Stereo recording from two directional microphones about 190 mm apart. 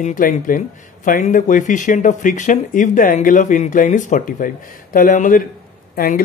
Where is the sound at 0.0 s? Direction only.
45° left (ahead or behind).